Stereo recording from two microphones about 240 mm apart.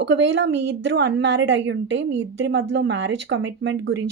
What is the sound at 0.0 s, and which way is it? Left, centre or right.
Speech, right.